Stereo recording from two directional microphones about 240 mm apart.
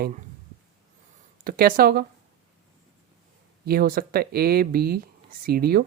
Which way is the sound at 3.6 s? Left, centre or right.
Right.